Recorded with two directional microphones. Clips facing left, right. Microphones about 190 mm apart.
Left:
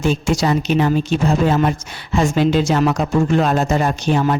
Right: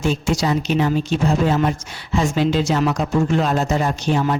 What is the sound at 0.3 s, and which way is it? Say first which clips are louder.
Speech: left 2 dB; 55° left (ahead or behind).